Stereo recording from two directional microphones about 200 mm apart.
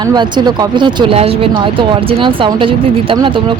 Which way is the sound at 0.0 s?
20° right (ahead or behind).